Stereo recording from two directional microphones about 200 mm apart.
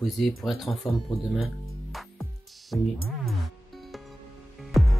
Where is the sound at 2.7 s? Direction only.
5° left (ahead or behind).